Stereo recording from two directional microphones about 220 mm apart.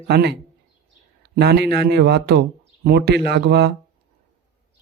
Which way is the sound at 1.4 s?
45° right (ahead or behind).